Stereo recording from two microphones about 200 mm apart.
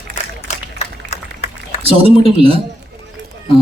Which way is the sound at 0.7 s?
35° left (ahead or behind).